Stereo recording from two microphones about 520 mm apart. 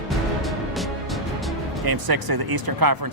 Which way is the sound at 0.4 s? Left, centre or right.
Centre.